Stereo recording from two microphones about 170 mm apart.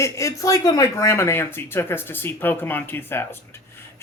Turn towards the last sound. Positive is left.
turn(degrees=15)  # may be behind; listen again after turning